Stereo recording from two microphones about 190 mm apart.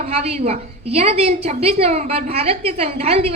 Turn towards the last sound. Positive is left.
turn(degrees=-30)  # may be behind; listen again after turning